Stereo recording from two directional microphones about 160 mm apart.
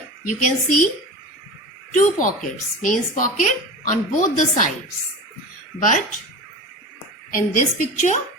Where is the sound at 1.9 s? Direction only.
55° left (ahead or behind).